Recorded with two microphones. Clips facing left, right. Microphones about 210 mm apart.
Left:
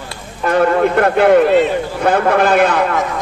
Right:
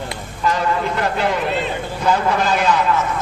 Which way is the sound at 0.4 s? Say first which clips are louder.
Left 8 dB; 60° left (ahead or behind).